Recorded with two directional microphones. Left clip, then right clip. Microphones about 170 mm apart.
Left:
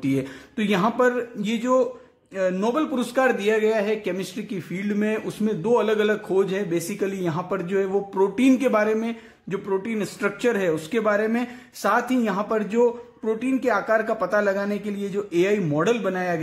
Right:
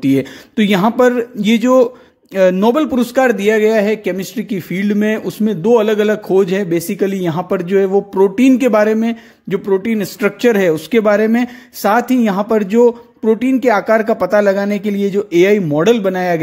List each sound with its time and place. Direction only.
0.0 s speech: 40° right (ahead or behind)